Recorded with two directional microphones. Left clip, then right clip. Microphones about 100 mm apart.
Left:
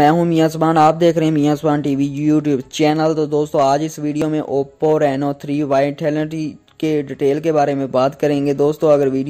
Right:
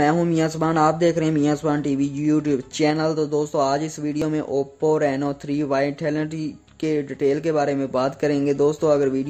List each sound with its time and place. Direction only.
0.2 s a man's voice: 40° left (ahead or behind)